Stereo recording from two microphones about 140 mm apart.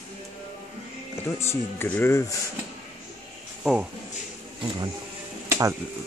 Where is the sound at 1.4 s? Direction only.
15° left (ahead or behind).